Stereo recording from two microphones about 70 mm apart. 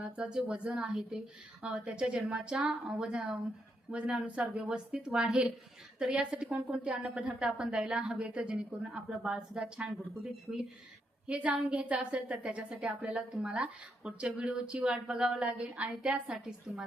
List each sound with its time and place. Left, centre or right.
0.0 s a woman's voice: centre
10.5 s a woman's voice: right